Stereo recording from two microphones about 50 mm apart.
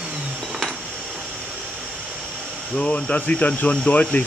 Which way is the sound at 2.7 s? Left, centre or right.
Left.